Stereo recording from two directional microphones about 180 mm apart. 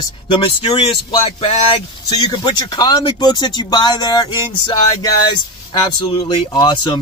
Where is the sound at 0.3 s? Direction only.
30° left (ahead or behind).